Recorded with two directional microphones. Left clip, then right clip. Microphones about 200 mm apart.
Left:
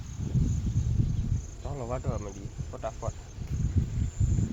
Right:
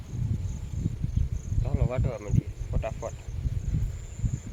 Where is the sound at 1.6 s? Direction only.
10° right (ahead or behind).